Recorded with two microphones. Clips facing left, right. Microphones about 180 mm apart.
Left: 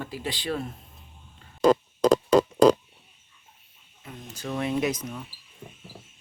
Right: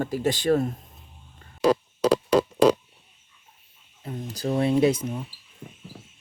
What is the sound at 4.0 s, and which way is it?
Speech, 35° right (ahead or behind).